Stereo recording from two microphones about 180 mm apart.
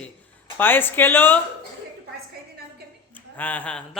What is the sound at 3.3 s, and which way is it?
Speech, 10° left (ahead or behind).